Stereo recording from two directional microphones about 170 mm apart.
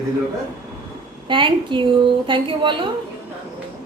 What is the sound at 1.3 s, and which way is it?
A woman's voice, 30° right (ahead or behind).